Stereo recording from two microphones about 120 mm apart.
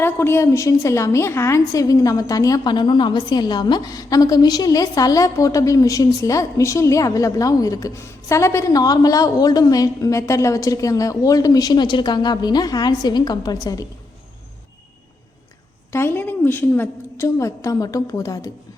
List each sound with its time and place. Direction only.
0.0 s a woman's voice: 20° left (ahead or behind)
15.9 s a woman's voice: 20° left (ahead or behind)